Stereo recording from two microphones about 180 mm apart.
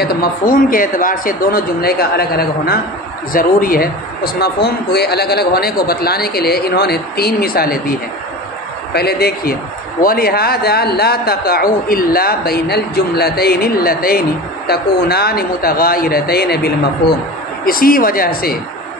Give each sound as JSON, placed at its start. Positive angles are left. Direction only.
{"t": 0.0, "sound": "speech", "side_deg": 60}